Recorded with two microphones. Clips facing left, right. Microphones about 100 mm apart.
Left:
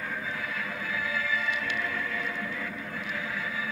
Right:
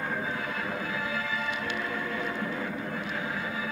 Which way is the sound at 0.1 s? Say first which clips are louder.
Right 3 dB; 35° right (ahead or behind).